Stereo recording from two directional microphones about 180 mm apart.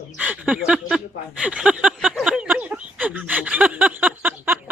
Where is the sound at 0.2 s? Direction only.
5° right (ahead or behind).